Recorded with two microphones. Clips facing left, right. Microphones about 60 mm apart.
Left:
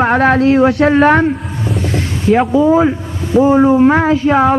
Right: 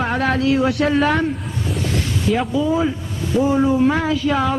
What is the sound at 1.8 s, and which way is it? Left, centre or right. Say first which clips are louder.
Music: left 6 dB; left.